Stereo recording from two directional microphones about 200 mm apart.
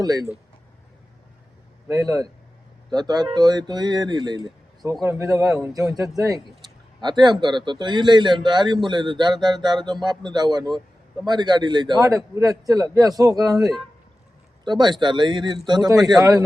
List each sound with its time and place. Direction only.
0.0 s a man's voice: 20° right (ahead or behind)
1.9 s a man's voice: 15° right (ahead or behind)